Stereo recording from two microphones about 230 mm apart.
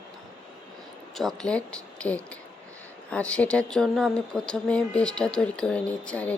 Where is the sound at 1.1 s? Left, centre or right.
Centre.